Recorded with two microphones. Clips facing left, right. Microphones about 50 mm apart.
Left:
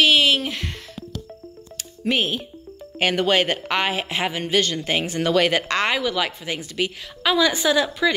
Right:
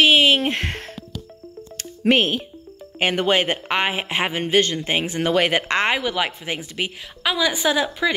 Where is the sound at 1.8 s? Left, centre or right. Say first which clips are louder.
Right 5 dB; right.